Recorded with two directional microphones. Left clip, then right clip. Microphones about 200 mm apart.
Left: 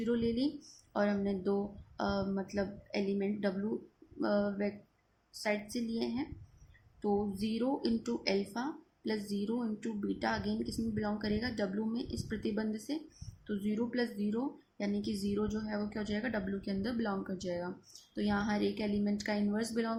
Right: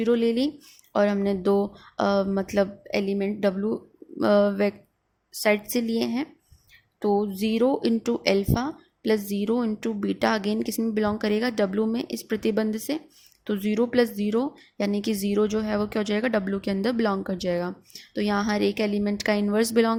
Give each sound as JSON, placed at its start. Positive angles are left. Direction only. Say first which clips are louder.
{"t": 0.0, "sound": "speech", "louder": "right 11 dB", "side_deg": -45}